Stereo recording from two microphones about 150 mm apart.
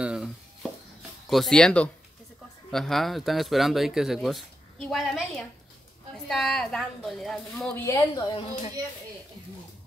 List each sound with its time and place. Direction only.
0.0 s speech: 5° right (ahead or behind)
7.7 s speech: 15° left (ahead or behind)
8.1 s a woman's voice: 30° left (ahead or behind)